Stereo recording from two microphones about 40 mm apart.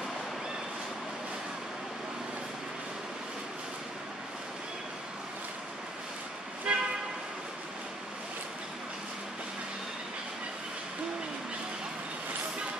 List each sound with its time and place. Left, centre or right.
6.7 s vehicle: right